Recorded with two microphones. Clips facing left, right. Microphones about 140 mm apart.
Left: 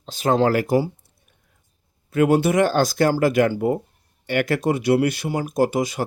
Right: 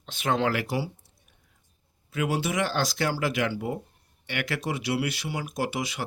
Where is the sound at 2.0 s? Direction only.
50° left (ahead or behind).